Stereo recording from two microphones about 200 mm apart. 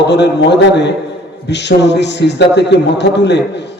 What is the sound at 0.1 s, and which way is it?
A man's voice, 60° left (ahead or behind).